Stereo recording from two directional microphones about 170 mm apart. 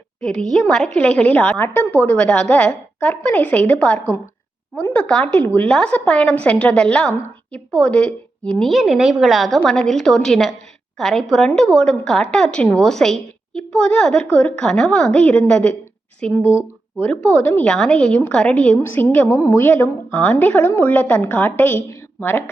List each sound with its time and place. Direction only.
0.2 s a woman's voice: 5° left (ahead or behind)